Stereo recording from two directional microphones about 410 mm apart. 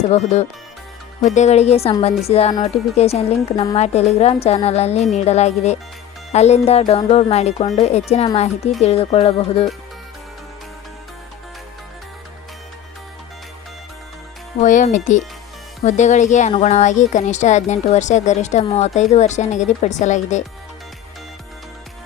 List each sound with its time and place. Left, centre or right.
0.0 s speech: centre
14.6 s speech: centre